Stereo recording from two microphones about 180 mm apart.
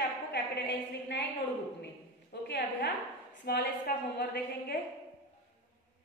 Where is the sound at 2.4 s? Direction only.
70° left (ahead or behind).